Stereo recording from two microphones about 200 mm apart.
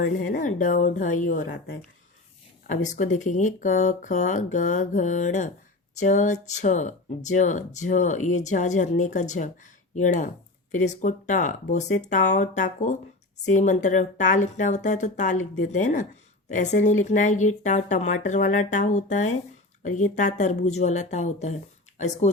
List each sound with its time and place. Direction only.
0.3 s speech: 40° left (ahead or behind)
2.6 s speech: 35° left (ahead or behind)